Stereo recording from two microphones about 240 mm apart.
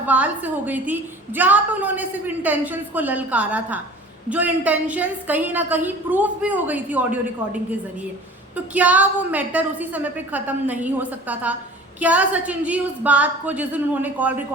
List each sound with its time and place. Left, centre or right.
0.0 s a woman's voice: centre